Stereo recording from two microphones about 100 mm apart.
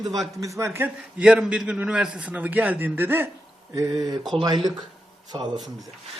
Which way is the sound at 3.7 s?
35° right (ahead or behind).